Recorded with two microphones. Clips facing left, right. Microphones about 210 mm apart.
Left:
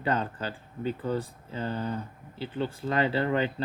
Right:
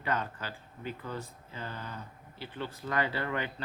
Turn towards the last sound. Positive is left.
turn(degrees=25)  # may be behind; listen again after turning